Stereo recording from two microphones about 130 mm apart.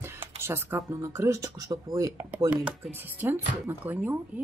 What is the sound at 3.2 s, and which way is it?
Speech, 15° right (ahead or behind).